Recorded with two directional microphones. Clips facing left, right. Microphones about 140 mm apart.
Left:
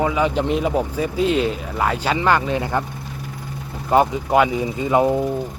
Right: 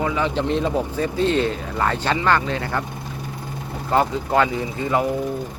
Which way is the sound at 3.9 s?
15° left (ahead or behind).